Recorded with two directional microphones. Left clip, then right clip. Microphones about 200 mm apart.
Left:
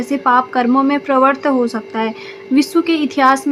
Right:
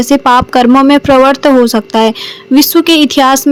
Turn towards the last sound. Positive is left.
turn(degrees=-30)  # may be behind; listen again after turning